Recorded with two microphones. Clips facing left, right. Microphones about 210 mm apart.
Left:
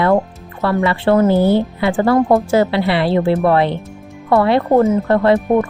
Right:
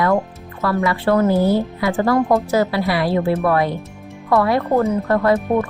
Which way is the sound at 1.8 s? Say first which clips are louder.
Left 3 dB; 30° left (ahead or behind).